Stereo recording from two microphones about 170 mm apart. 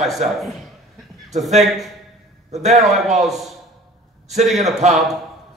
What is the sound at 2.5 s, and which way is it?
Speech, 40° right (ahead or behind).